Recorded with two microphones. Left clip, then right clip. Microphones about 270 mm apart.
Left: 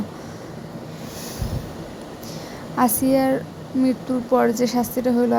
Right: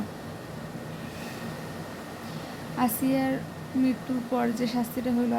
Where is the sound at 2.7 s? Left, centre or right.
Left.